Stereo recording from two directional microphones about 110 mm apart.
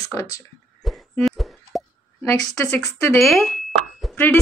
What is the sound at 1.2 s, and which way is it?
Plop, centre (ahead or behind).